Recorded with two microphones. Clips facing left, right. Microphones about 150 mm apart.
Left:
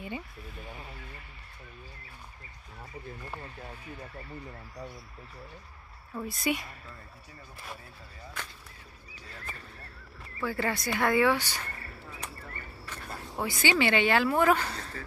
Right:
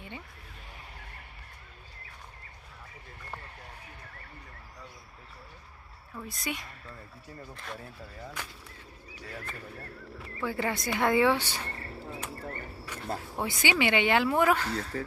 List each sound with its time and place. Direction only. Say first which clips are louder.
6.2 s speech: left 6 dB; 5° left (ahead or behind)
10.4 s speech: even; 20° right (ahead or behind)
12.4 s a sound: right 6 dB; 40° right (ahead or behind)
12.8 s a sound: right 3 dB; 10° right (ahead or behind)
13.4 s speech: left 2 dB; 20° right (ahead or behind)
14.5 s speech: left 1 dB; centre (ahead or behind)